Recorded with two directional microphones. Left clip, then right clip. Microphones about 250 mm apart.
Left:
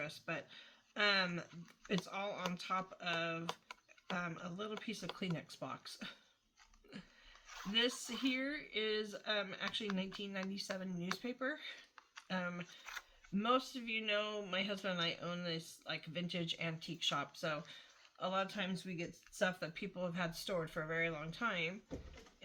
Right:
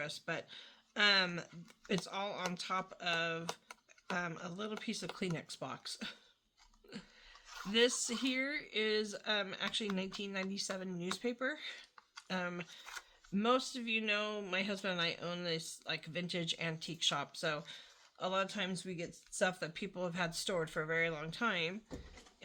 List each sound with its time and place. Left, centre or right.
0.0 s speech: right
12.8 s speech: centre
13.3 s speech: right